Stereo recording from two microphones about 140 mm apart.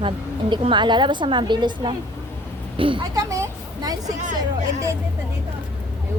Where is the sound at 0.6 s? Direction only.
35° right (ahead or behind).